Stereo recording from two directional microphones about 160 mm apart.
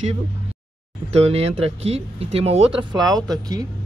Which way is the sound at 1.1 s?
40° right (ahead or behind).